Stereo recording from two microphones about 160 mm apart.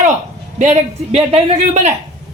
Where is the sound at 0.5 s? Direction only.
45° right (ahead or behind).